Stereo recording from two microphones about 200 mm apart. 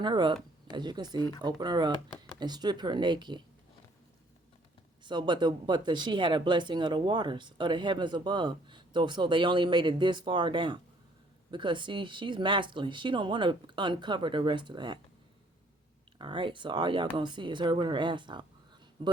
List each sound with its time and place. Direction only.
0.0 s speech: 20° right (ahead or behind)
5.0 s speech: 20° right (ahead or behind)
16.1 s speech: 25° right (ahead or behind)